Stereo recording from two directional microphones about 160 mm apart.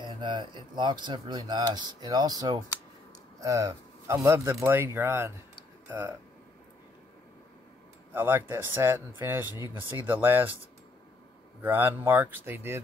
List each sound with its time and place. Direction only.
0.0 s a man's voice: 25° right (ahead or behind)
8.1 s a man's voice: 15° right (ahead or behind)
11.6 s a man's voice: 10° right (ahead or behind)